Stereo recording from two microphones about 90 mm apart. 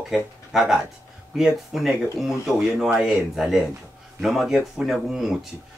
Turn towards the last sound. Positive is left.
turn(degrees=-5)  # may be behind; listen again after turning